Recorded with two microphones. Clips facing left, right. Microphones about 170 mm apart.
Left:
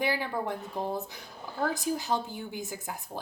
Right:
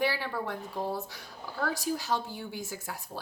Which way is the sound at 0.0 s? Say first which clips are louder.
Left 1 dB; 15° left (ahead or behind).